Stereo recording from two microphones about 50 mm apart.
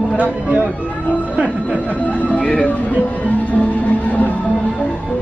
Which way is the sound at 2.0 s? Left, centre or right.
Left.